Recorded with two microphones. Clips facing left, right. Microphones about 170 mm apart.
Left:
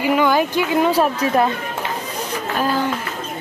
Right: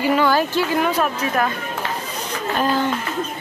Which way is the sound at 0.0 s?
15° left (ahead or behind).